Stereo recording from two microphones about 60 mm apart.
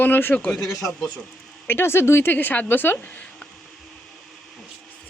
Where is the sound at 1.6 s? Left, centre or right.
Left.